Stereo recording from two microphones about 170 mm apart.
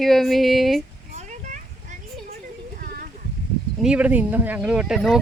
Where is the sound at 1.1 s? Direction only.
45° right (ahead or behind).